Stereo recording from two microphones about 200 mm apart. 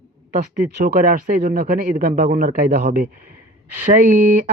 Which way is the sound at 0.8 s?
40° right (ahead or behind).